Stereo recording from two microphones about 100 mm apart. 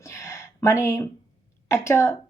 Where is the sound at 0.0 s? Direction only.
30° left (ahead or behind).